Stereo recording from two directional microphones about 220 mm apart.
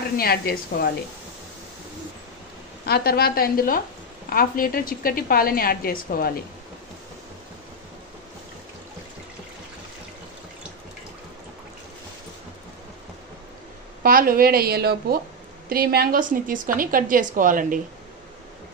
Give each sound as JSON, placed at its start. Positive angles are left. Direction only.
{"t": 0.2, "sound": "a woman's voice", "side_deg": 45}
{"t": 2.8, "sound": "a woman's voice", "side_deg": 45}
{"t": 14.0, "sound": "a woman's voice", "side_deg": -40}